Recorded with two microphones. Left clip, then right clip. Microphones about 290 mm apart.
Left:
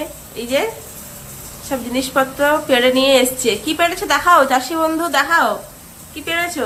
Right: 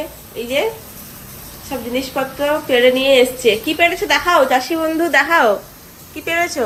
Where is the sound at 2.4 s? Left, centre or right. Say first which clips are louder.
Right 2 dB; centre.